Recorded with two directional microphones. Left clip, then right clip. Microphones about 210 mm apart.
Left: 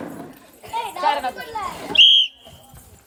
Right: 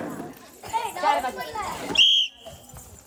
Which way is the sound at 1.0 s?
45° left (ahead or behind).